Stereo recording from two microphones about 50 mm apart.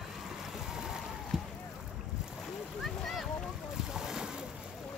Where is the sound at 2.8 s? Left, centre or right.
Centre.